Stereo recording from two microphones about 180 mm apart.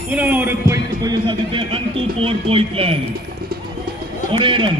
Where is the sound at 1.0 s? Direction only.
25° right (ahead or behind).